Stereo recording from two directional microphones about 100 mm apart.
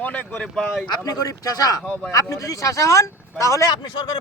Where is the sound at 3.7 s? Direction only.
45° left (ahead or behind).